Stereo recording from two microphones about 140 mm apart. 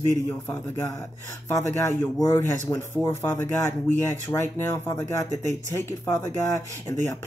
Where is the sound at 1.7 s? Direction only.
20° left (ahead or behind).